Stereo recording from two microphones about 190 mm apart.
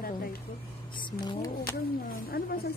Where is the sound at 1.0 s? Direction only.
25° left (ahead or behind).